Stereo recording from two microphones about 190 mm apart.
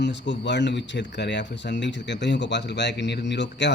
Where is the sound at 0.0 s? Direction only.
70° left (ahead or behind).